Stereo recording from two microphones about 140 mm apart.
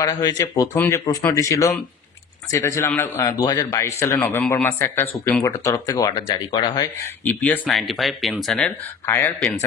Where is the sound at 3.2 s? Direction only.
30° left (ahead or behind).